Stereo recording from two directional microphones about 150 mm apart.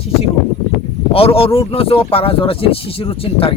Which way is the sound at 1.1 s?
40° left (ahead or behind).